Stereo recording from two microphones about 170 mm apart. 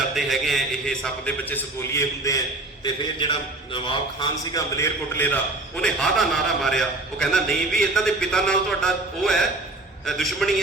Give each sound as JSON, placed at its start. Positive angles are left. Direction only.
{"t": 0.1, "sound": "a man's voice", "side_deg": 0}
{"t": 2.8, "sound": "a man's voice", "side_deg": 30}